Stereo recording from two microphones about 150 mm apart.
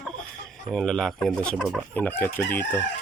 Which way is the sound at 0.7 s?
5° left (ahead or behind).